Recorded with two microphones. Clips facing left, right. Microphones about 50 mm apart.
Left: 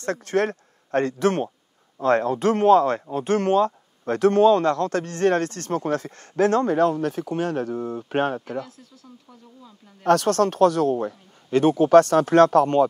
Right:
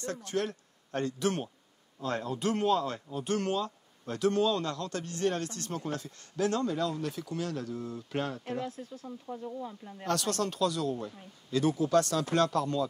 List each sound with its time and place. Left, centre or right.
0.0 s speech: left
8.6 s speech: right
10.0 s speech: left